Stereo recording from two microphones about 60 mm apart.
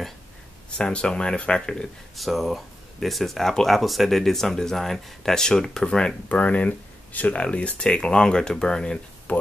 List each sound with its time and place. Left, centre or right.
0.7 s speech: centre
2.1 s speech: centre
6.2 s speech: left
9.3 s speech: left